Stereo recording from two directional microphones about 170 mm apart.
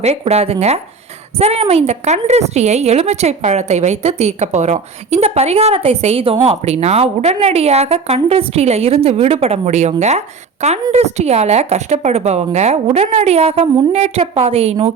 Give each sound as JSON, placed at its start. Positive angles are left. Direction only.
{"t": 0.0, "sound": "a woman's voice", "side_deg": -40}